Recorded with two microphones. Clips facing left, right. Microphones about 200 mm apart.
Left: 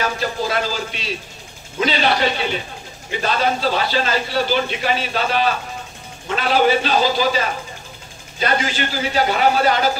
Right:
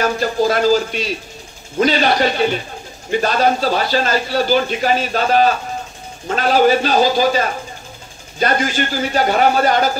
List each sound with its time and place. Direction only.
0.0 s speech: 45° right (ahead or behind)